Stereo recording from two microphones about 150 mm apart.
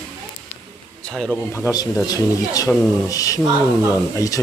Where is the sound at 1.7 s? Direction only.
20° left (ahead or behind).